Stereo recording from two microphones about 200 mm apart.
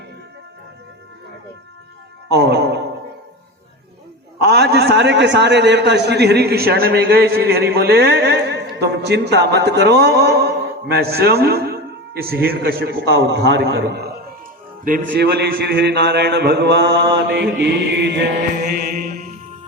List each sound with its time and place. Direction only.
2.3 s a man's voice: 55° right (ahead or behind)
4.4 s a man's voice: 55° right (ahead or behind)
15.7 s a man's voice: 55° right (ahead or behind)
18.9 s music: 45° right (ahead or behind)